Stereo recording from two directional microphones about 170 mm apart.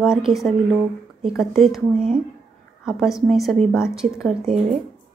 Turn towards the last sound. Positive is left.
turn(degrees=-5)  # may be behind; listen again after turning